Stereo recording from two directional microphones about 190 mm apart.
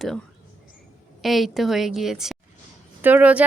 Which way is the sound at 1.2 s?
Centre (ahead or behind).